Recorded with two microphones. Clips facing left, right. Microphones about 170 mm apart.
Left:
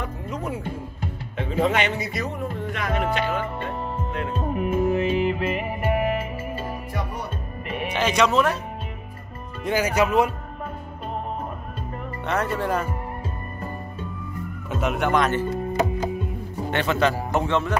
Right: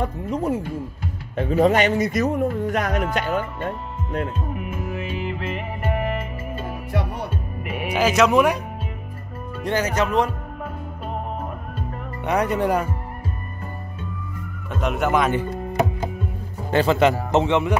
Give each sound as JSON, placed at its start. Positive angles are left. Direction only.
{"t": 0.0, "sound": "speech", "side_deg": -35}
{"t": 4.3, "sound": "music", "side_deg": 30}
{"t": 7.6, "sound": "speech", "side_deg": -10}
{"t": 9.6, "sound": "speech", "side_deg": 10}
{"t": 12.3, "sound": "speech", "side_deg": -15}
{"t": 14.7, "sound": "speech", "side_deg": 0}
{"t": 16.7, "sound": "speech", "side_deg": -30}